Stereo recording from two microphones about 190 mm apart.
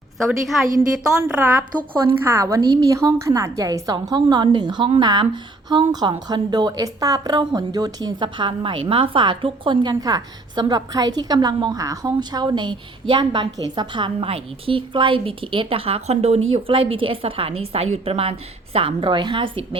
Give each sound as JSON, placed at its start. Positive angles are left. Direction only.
{"t": 0.2, "sound": "a woman's voice", "side_deg": 0}